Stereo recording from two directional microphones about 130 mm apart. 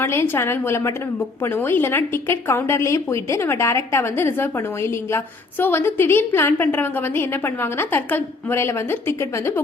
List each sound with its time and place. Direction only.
0.0 s a woman's voice: 20° left (ahead or behind)